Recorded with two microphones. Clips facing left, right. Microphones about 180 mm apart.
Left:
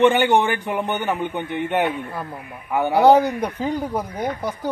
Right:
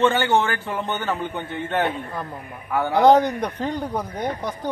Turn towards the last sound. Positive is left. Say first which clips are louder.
# left 1 dB
turn(degrees=10)  # may be behind; listen again after turning